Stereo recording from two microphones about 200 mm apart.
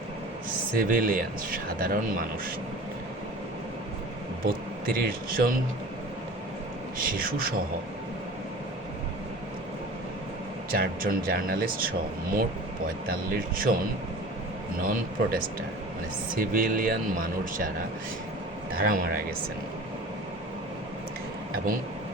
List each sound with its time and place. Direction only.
0.8 s speech: 45° right (ahead or behind)
4.9 s speech: 45° right (ahead or behind)
7.0 s speech: 45° right (ahead or behind)
10.7 s speech: 45° right (ahead or behind)
14.8 s speech: 45° right (ahead or behind)
18.8 s speech: 45° right (ahead or behind)